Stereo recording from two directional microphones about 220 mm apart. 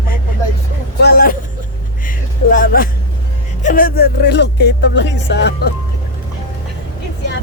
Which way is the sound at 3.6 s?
40° left (ahead or behind).